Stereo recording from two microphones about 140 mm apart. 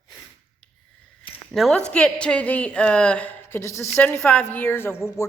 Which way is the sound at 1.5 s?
Centre (ahead or behind).